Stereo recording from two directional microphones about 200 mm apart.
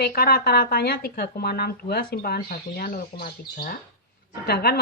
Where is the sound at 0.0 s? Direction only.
50° left (ahead or behind).